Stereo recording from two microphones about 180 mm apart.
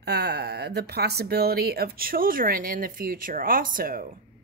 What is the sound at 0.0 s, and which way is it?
A woman's voice, 65° right (ahead or behind).